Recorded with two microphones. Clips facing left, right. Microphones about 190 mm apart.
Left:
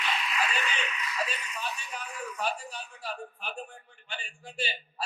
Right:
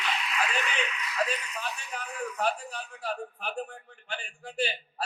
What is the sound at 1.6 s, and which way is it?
A man's voice, 55° right (ahead or behind).